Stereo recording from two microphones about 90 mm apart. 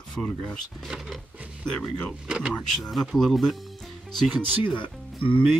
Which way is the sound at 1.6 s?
10° left (ahead or behind).